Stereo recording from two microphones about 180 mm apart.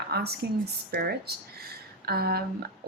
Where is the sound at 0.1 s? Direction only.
60° right (ahead or behind).